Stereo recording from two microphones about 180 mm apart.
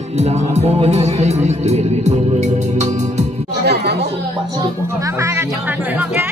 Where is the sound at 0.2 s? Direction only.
40° right (ahead or behind).